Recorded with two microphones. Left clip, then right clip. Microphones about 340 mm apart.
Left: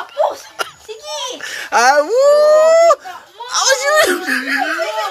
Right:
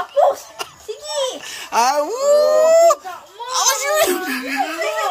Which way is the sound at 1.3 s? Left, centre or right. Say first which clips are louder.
Left 8 dB; centre.